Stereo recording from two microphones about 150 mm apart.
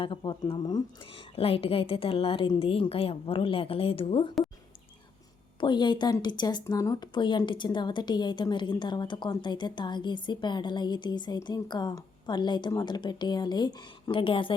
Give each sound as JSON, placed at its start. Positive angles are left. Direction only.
{"t": 0.0, "sound": "a woman's voice", "side_deg": 35}
{"t": 5.5, "sound": "speech", "side_deg": 30}